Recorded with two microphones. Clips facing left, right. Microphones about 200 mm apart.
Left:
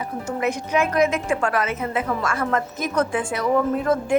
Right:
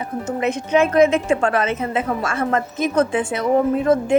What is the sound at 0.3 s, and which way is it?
A woman's voice, 25° right (ahead or behind).